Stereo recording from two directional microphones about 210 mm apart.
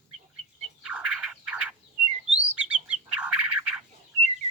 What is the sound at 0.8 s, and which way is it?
Bird, 5° right (ahead or behind).